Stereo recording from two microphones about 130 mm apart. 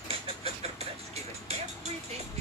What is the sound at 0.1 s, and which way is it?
Vehicle, 50° right (ahead or behind).